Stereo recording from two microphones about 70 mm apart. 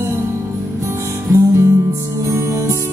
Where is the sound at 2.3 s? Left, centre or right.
Right.